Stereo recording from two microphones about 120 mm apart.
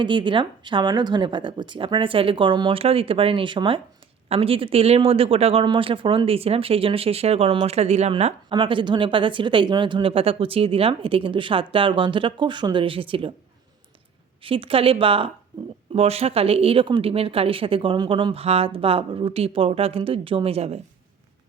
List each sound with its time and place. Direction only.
0.0 s speech: 40° right (ahead or behind); by 8.1 s 65° right (ahead or behind)
8.4 s speech: 45° right (ahead or behind)
14.4 s speech: 50° right (ahead or behind)
15.9 s speech: 55° right (ahead or behind)
18.4 s speech: 55° right (ahead or behind)